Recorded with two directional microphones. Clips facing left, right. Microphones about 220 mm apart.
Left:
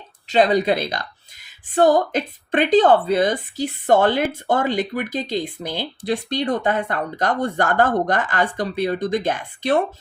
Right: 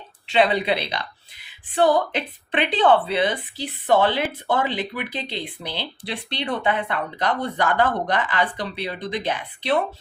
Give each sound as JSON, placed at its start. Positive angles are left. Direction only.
{"t": 0.3, "sound": "speech", "side_deg": 40}